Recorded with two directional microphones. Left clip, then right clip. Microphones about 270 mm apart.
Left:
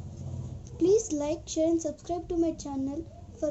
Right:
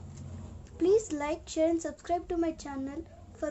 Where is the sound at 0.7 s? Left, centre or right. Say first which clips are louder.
Left 2 dB; centre.